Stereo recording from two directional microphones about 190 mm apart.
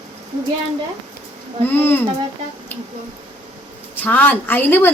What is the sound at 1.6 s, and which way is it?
Speech, 10° left (ahead or behind).